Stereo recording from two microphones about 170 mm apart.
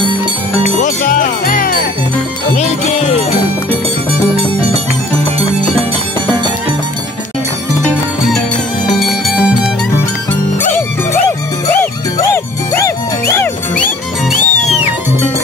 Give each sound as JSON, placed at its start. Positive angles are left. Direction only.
{"t": 0.7, "sound": "music", "side_deg": 50}
{"t": 2.5, "sound": "music", "side_deg": 40}
{"t": 9.0, "sound": "music", "side_deg": 0}
{"t": 11.2, "sound": "music", "side_deg": 10}
{"t": 13.8, "sound": "music", "side_deg": 45}